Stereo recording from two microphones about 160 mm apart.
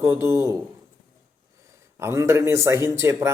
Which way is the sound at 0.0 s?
15° right (ahead or behind).